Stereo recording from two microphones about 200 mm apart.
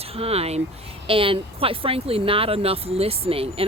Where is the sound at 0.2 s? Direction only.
30° right (ahead or behind).